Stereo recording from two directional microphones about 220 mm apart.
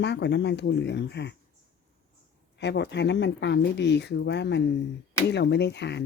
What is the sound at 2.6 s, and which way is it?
Speech, 50° left (ahead or behind).